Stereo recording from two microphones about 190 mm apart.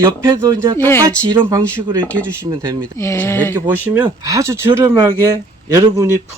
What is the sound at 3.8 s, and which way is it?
Speech, 10° right (ahead or behind).